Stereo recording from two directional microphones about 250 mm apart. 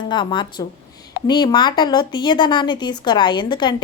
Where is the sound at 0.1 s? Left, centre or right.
Centre.